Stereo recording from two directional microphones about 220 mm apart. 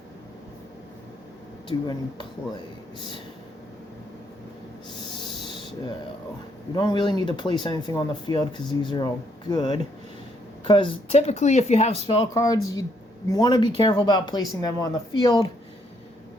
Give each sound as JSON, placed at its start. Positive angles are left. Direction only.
{"t": 1.7, "sound": "speech", "side_deg": 20}
{"t": 5.0, "sound": "rub", "side_deg": 20}
{"t": 6.7, "sound": "speech", "side_deg": 20}
{"t": 12.0, "sound": "speech", "side_deg": 15}